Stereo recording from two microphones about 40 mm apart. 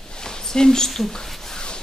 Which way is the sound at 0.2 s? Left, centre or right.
Centre.